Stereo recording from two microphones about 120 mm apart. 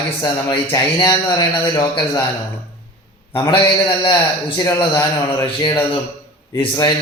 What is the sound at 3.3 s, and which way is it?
Speech, 40° left (ahead or behind).